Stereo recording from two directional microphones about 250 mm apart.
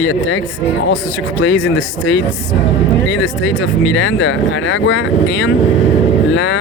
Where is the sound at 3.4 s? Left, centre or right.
Left.